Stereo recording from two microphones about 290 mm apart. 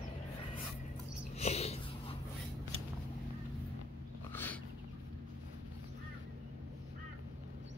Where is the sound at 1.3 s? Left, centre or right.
Left.